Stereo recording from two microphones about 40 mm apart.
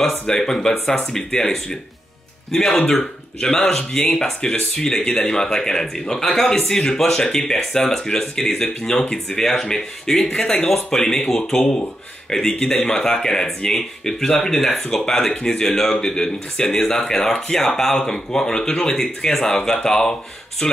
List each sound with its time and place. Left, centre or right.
0.3 s speech: centre